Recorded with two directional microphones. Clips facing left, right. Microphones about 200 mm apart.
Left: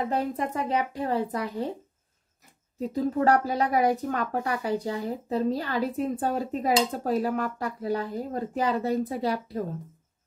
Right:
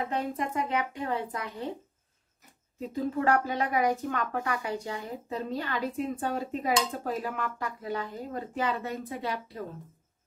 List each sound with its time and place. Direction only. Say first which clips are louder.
0.1 s speech: left 3 dB; 35° left (ahead or behind)
2.9 s speech: left 4 dB; 35° left (ahead or behind)